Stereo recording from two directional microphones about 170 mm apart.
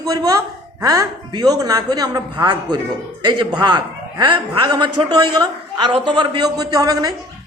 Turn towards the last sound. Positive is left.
turn(degrees=-25)  # may be behind; listen again after turning